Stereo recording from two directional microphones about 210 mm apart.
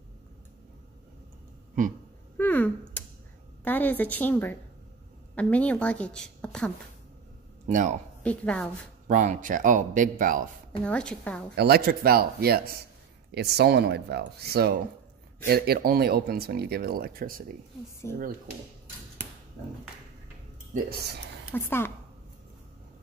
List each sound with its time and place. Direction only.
1.8 s a sound: 40° right (ahead or behind)
2.3 s a sound: 10° left (ahead or behind)
3.6 s a woman's voice: 10° left (ahead or behind)
7.6 s speech: 35° right (ahead or behind)
8.2 s a woman's voice: 5° left (ahead or behind)
9.0 s speech: 35° right (ahead or behind)
10.8 s a woman's voice: 5° left (ahead or behind)
11.5 s speech: 50° right (ahead or behind)
20.7 s speech: 45° right (ahead or behind)
21.5 s a woman's voice: 10° left (ahead or behind)